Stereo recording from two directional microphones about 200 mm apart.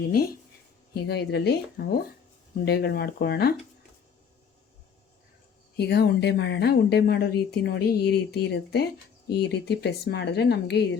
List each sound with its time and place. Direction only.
0.9 s speech: 55° left (ahead or behind)
5.7 s speech: 55° left (ahead or behind)